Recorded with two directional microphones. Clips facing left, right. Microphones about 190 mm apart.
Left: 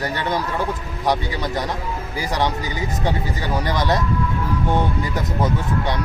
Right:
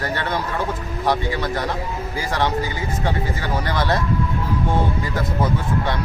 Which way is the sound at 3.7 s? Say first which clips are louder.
Left 1 dB; 15° left (ahead or behind).